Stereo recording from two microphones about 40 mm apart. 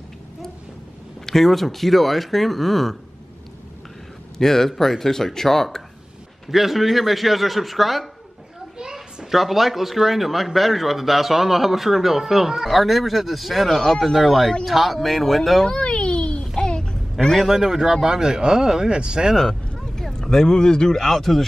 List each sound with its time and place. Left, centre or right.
1.2 s speech: centre
4.4 s speech: centre
6.5 s speech: centre
15.6 s a sound: left
16.5 s child singing: centre
17.4 s speech: centre
20.0 s speech: centre
20.9 s speech: centre